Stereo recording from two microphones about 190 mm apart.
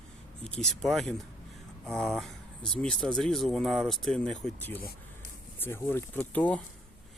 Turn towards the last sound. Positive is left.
turn(degrees=10)  # may be behind; listen again after turning